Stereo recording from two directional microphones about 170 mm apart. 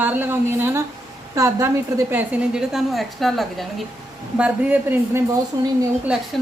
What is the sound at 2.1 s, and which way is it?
A woman's voice, 5° right (ahead or behind).